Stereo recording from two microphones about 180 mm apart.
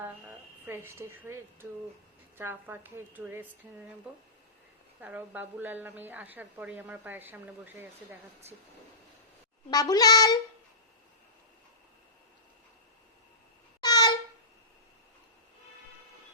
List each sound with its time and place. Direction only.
0.0 s a woman's voice: 10° right (ahead or behind)
4.9 s a woman's voice: 10° right (ahead or behind)
9.6 s a child's voice: 20° left (ahead or behind)
13.8 s a sound: 20° left (ahead or behind)